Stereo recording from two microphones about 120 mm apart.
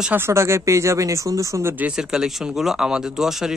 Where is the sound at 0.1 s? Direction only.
20° right (ahead or behind).